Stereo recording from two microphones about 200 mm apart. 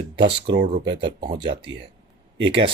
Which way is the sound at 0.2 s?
25° right (ahead or behind).